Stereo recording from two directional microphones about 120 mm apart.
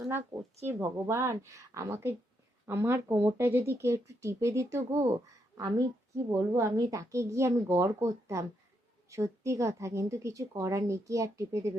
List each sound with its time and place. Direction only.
0.6 s a woman's voice: 20° right (ahead or behind)